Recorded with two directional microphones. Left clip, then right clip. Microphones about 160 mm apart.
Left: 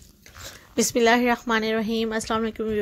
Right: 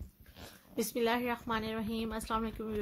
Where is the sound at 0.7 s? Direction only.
50° left (ahead or behind).